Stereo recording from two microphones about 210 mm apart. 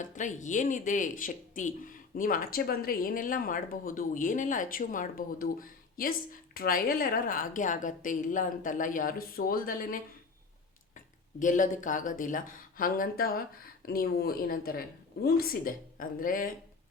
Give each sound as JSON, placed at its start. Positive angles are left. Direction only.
{"t": 0.0, "sound": "speech", "side_deg": 35}